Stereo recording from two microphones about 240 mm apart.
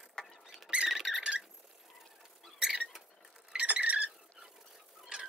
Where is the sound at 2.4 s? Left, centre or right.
Centre.